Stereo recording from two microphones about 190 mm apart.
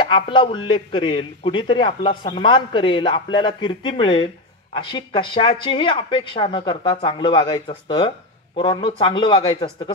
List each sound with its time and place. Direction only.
0.0 s a man's voice: 25° left (ahead or behind)